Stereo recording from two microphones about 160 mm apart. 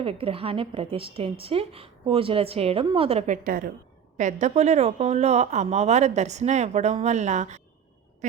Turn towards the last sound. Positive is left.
turn(degrees=-45)  # may be behind; listen again after turning